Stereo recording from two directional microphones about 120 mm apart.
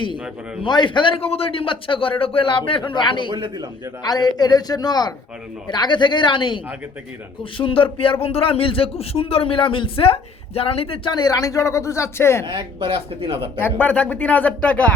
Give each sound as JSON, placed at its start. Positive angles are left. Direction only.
{"t": 0.6, "sound": "a man's voice", "side_deg": 40}
{"t": 3.2, "sound": "speech", "side_deg": -40}
{"t": 4.0, "sound": "a man's voice", "side_deg": 35}
{"t": 12.5, "sound": "speech", "side_deg": -40}
{"t": 13.7, "sound": "speech", "side_deg": 10}